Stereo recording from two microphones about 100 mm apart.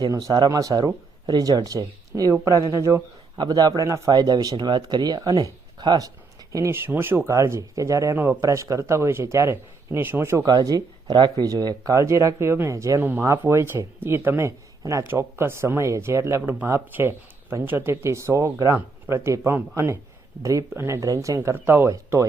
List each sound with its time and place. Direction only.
0.1 s speech: 35° right (ahead or behind)
3.3 s speech: 45° right (ahead or behind)
4.1 s speech: 40° right (ahead or behind)
6.5 s speech: 30° right (ahead or behind)
10.4 s speech: 40° right (ahead or behind)
13.0 s speech: 20° right (ahead or behind)